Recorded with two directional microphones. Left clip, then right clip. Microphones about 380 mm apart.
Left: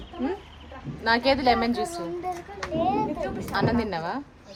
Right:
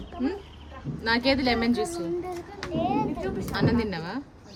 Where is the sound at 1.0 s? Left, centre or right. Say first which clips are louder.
Left 3 dB; centre.